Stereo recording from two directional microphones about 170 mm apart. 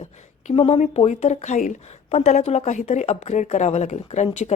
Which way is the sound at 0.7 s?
40° left (ahead or behind).